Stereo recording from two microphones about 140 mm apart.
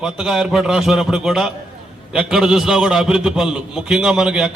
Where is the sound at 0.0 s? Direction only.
5° right (ahead or behind).